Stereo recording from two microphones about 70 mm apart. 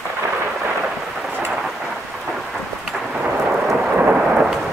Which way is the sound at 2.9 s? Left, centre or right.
Centre.